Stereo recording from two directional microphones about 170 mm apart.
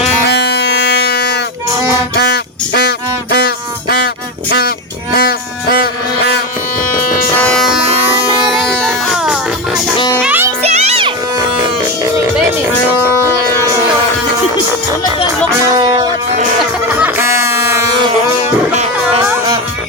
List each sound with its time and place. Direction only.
0.3 s music: 80° left
2.1 s a sound: 70° left (ahead or behind)
3.3 s music: 65° left (ahead or behind)
5.1 s a sound: 60° left (ahead or behind)
6.8 s music: 55° left (ahead or behind)
7.3 s music: 5° left (ahead or behind)
10.6 s music: 40° right (ahead or behind)
11.3 s a sound: 25° right (ahead or behind)
16.9 s music: 10° right (ahead or behind)
19.0 s music: 15° right (ahead or behind)